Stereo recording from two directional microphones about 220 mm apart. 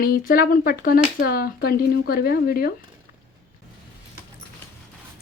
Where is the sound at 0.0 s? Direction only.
40° left (ahead or behind).